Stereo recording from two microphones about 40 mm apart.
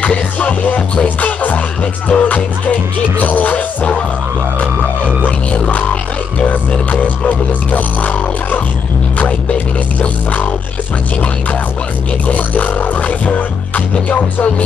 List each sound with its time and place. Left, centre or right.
0.0 s music: left
6.9 s music: left
12.3 s music: left